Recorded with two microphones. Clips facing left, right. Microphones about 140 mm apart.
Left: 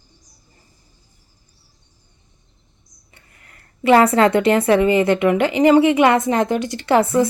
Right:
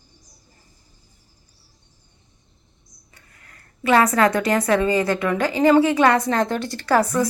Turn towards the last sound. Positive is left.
turn(degrees=25)  # may be behind; listen again after turning